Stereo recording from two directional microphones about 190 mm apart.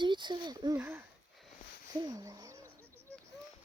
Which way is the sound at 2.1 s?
15° right (ahead or behind).